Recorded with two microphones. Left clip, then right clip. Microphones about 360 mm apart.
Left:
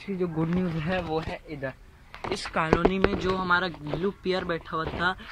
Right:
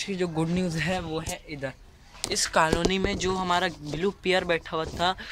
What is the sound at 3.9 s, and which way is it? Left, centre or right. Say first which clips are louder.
Speech: right 3 dB; right.